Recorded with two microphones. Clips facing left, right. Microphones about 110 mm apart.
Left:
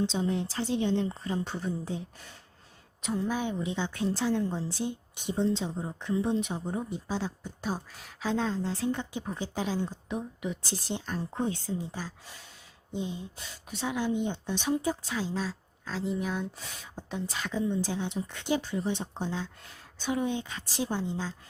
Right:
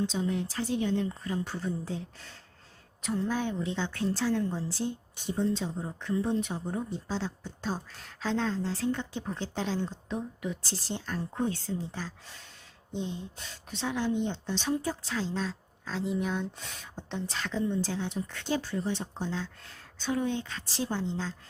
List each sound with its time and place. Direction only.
0.0 s a woman's voice: 25° left (ahead or behind); by 21.3 s 10° left (ahead or behind)